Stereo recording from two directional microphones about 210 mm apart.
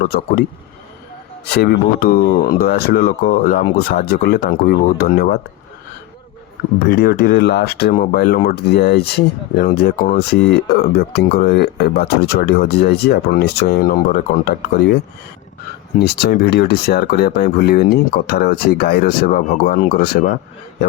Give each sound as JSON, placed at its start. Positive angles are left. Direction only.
{"t": 0.1, "sound": "speech", "side_deg": 45}
{"t": 1.5, "sound": "speech", "side_deg": 50}
{"t": 6.8, "sound": "speech", "side_deg": 50}
{"t": 16.0, "sound": "speech", "side_deg": 50}